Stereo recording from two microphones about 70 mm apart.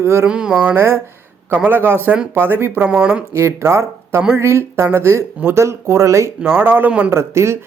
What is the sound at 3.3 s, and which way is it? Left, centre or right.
Speech, right.